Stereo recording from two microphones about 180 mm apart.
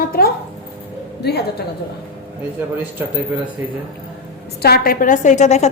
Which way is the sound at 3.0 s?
10° right (ahead or behind).